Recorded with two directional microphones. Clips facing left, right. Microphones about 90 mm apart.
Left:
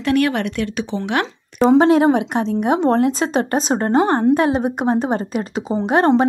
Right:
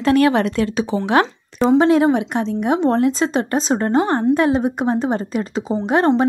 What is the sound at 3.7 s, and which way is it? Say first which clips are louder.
A woman's voice: left 2 dB; 30° left (ahead or behind).